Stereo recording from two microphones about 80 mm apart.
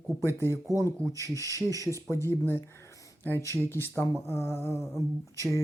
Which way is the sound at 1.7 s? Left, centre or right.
Right.